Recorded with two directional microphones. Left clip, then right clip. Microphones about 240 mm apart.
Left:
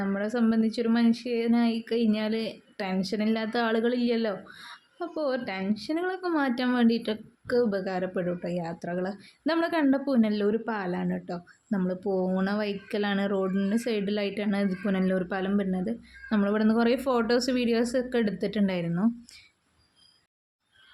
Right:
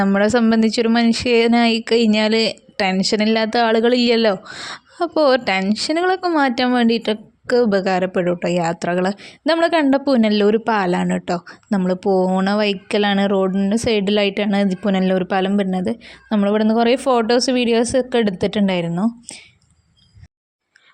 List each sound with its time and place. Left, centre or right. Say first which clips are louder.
0.0 s speech: right 13 dB; right